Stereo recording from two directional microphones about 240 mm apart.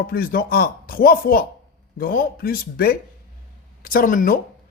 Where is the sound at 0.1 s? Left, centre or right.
Left.